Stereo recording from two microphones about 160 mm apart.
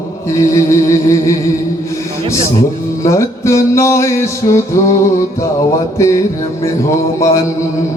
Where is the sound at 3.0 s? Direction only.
20° left (ahead or behind).